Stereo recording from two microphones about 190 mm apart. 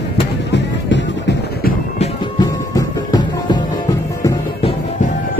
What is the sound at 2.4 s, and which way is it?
Music, 20° left (ahead or behind).